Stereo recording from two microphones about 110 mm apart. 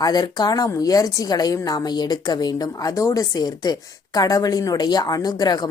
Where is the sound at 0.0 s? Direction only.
40° left (ahead or behind).